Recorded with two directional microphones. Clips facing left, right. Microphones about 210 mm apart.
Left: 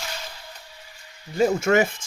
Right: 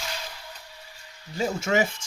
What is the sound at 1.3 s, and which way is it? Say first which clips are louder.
Speech: left 5 dB; 55° left (ahead or behind).